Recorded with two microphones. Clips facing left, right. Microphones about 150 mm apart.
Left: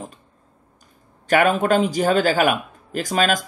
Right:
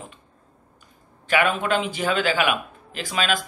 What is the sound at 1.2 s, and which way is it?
A man's voice, 45° left (ahead or behind).